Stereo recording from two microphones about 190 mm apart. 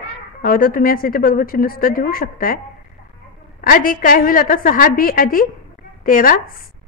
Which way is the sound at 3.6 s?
45° left (ahead or behind).